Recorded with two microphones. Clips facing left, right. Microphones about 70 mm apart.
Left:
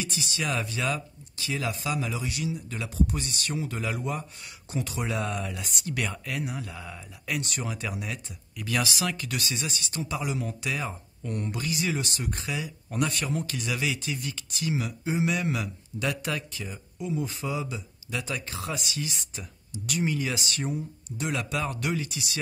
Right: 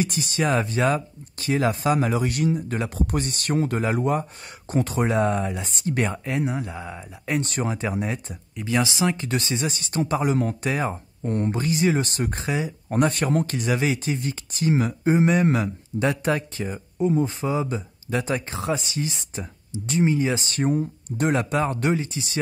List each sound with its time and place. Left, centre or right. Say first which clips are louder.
0.0 s speech: right 8 dB; right